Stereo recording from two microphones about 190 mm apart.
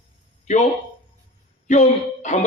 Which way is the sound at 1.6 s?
40° left (ahead or behind).